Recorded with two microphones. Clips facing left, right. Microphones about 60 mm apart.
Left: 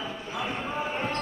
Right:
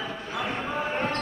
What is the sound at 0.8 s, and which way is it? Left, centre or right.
Basketball bounce, right.